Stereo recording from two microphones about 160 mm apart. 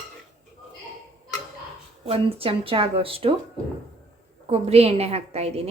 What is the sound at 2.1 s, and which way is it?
Speech, 35° right (ahead or behind).